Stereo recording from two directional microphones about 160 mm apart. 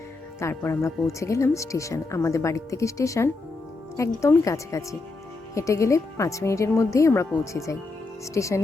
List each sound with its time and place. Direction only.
0.3 s speech: 15° left (ahead or behind)